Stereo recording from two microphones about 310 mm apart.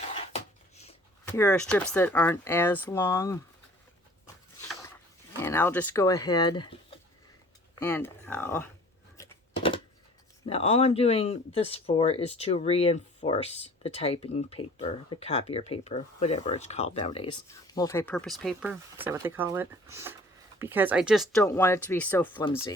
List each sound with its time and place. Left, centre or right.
1.3 s speech: centre
5.4 s speech: centre
9.1 s a sound: centre
10.4 s speech: centre